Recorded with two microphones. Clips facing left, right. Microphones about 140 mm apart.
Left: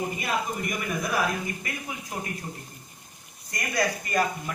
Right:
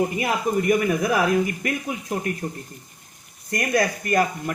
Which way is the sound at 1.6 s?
70° right (ahead or behind).